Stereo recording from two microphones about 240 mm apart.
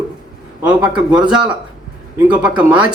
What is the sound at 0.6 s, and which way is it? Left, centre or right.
Speech, centre.